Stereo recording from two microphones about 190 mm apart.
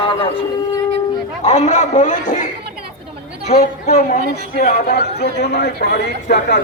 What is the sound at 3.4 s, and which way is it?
Speech, 35° left (ahead or behind).